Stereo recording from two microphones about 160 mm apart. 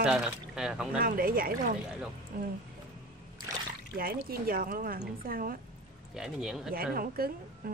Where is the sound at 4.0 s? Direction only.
65° right (ahead or behind).